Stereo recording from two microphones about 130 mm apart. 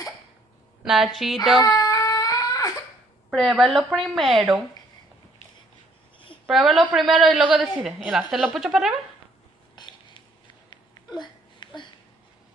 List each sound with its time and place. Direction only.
0.8 s a woman's voice: centre (ahead or behind)
1.6 s baby cry: 30° left (ahead or behind)
3.3 s a woman's voice: centre (ahead or behind)
6.4 s a woman's voice: centre (ahead or behind)
10.7 s a sound: 35° left (ahead or behind)